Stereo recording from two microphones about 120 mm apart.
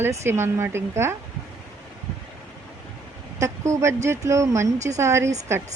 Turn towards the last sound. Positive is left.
turn(degrees=-20)  # may be behind; listen again after turning